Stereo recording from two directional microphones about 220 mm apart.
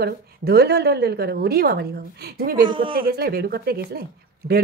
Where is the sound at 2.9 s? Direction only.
45° right (ahead or behind).